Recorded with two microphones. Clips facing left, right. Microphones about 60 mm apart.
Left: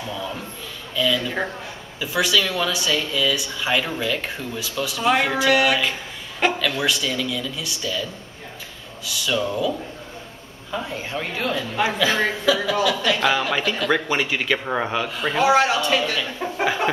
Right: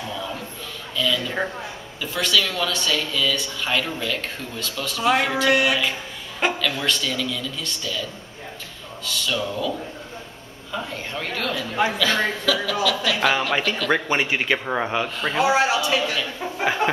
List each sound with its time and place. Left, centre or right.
0.9 s speech: centre
6.4 s a sound: centre
6.8 s speech: centre
10.7 s speech: centre
11.5 s speech: centre
12.0 s speech: centre
13.0 s speech: centre
14.1 s speech: right
14.6 s speech: centre